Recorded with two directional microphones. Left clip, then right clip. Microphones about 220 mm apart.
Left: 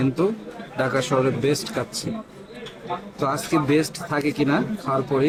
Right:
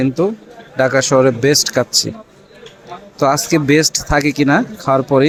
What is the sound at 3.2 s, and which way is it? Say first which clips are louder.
Speech: right 9 dB; 35° right (ahead or behind).